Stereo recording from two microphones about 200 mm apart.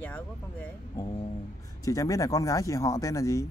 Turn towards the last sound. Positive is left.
turn(degrees=15)  # may be behind; listen again after turning